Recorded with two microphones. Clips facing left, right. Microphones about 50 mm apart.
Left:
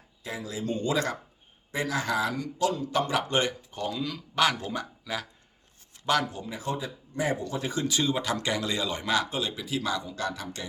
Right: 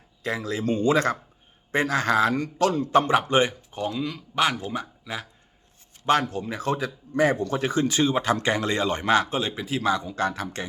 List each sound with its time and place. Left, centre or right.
0.2 s a man's voice: right
2.9 s speech: right; by 5.2 s centre
6.3 s speech: right
7.7 s speech: right